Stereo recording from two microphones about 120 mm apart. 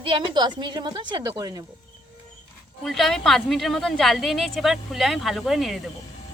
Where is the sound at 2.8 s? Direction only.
Centre (ahead or behind).